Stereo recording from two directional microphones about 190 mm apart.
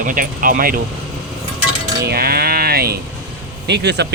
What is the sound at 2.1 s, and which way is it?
A man's voice, 55° right (ahead or behind).